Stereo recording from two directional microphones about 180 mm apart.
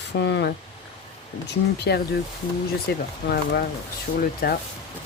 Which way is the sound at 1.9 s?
70° left (ahead or behind).